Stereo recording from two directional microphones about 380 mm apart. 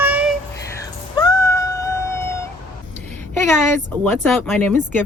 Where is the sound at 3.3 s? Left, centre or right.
Centre.